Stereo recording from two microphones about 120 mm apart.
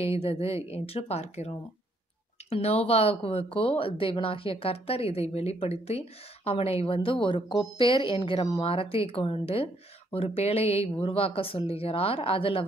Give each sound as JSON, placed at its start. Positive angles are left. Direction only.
{"t": 0.0, "sound": "speech", "side_deg": 55}
{"t": 2.5, "sound": "speech", "side_deg": 55}